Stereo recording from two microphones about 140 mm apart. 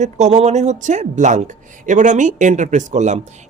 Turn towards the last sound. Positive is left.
turn(degrees=-55)  # may be behind; listen again after turning